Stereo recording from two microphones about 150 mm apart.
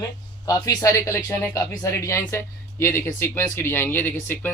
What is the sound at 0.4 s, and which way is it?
Speech, 25° left (ahead or behind).